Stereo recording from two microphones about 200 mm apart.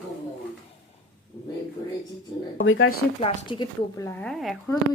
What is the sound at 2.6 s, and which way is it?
Speech, 80° left.